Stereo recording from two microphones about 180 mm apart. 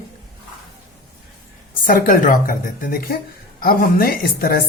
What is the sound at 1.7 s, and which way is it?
Speech, 50° left (ahead or behind).